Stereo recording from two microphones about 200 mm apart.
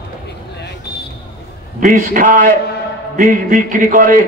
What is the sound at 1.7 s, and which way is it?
A man's voice, 40° right (ahead or behind).